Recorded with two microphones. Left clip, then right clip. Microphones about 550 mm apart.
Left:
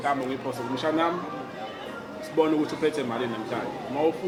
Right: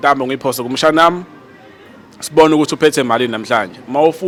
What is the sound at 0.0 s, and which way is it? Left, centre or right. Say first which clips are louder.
Speech: right 14 dB; right.